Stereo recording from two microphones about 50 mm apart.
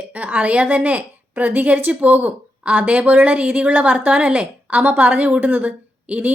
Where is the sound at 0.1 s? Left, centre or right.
Right.